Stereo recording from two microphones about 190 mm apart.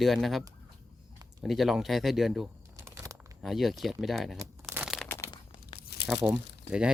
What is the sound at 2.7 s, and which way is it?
Crumpling, 15° right (ahead or behind).